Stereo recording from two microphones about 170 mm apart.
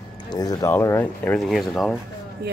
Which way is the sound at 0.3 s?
20° left (ahead or behind).